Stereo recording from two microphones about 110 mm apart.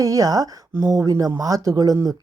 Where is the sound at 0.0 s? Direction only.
35° right (ahead or behind).